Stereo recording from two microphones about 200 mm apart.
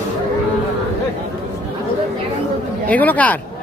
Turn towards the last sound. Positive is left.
turn(degrees=5)  # may be behind; listen again after turning